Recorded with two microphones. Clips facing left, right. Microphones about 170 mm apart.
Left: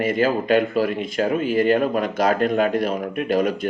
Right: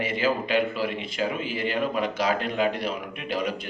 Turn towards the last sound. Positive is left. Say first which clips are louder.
# left 9 dB
turn(degrees=45)  # may be behind; listen again after turning